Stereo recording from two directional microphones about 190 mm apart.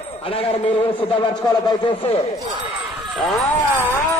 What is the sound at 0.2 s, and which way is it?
A man's voice, 30° left (ahead or behind).